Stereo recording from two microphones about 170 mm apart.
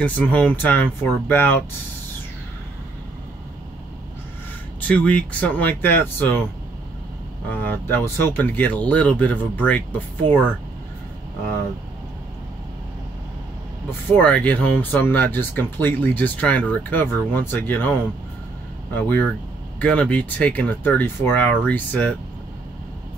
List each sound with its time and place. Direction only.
0.0 s speech: 10° left (ahead or behind)
4.8 s speech: 10° left (ahead or behind)
7.4 s speech: 10° left (ahead or behind)
13.8 s speech: 10° left (ahead or behind)
18.9 s speech: 10° left (ahead or behind)